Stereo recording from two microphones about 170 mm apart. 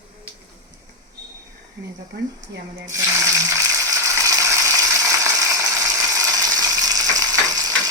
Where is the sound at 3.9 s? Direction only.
20° right (ahead or behind).